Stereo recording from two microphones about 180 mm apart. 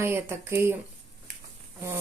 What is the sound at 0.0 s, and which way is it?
Speech, 15° right (ahead or behind).